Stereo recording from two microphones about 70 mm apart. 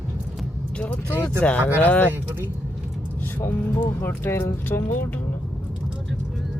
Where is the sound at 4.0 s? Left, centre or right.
Left.